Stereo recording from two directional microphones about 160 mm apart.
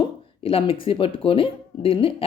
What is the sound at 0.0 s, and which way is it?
Speech, 35° left (ahead or behind).